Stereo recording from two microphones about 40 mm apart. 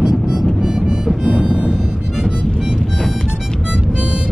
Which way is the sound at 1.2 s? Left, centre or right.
Right.